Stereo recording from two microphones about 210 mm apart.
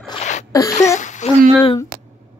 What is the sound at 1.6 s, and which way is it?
Speech, 15° left (ahead or behind).